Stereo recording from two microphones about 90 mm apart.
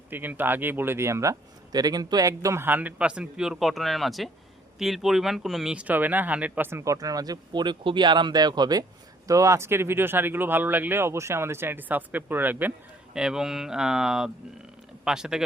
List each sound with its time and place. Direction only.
0.1 s speech: 20° right (ahead or behind); by 2.6 s 40° right (ahead or behind)
2.6 s speech: 20° right (ahead or behind); by 5.7 s 5° right (ahead or behind)
5.7 s speech: 20° right (ahead or behind); by 8.8 s 50° right (ahead or behind)
9.2 s speech: 35° right (ahead or behind); by 12.7 s 20° right (ahead or behind)
13.1 s speech: 10° right (ahead or behind)